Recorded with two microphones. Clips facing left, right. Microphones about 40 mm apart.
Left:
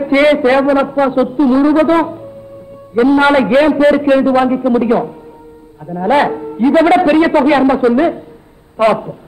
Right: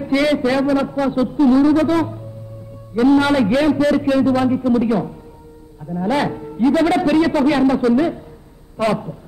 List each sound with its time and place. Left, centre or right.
0.0 s a man's voice: left